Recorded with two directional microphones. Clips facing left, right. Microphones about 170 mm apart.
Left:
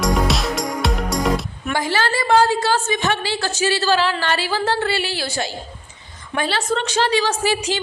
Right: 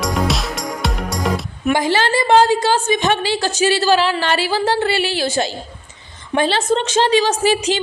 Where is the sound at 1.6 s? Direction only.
20° right (ahead or behind).